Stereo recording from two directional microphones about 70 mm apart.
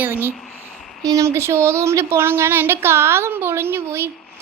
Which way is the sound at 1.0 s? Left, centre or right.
Right.